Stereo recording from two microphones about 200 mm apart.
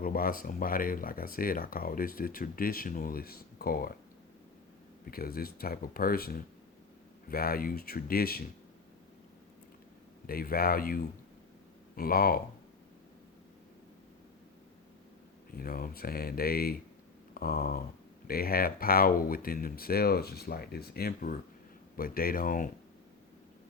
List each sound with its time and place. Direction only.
0.0 s speech: 45° left (ahead or behind)
5.1 s speech: 50° left (ahead or behind)
10.2 s speech: 50° left (ahead or behind)
15.5 s speech: 45° left (ahead or behind)